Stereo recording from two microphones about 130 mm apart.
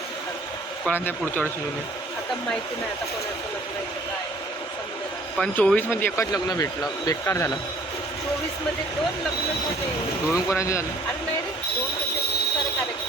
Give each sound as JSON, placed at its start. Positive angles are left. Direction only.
{"t": 0.9, "sound": "speech", "side_deg": 15}
{"t": 5.4, "sound": "speech", "side_deg": 10}
{"t": 6.3, "sound": "speech", "side_deg": 30}
{"t": 10.3, "sound": "speech", "side_deg": 25}